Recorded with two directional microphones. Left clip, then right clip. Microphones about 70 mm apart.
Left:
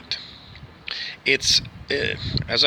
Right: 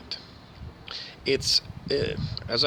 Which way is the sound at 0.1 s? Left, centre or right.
Right.